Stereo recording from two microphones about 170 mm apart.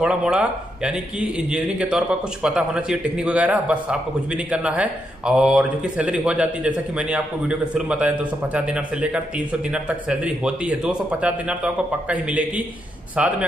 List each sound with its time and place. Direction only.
0.0 s speech: 5° right (ahead or behind)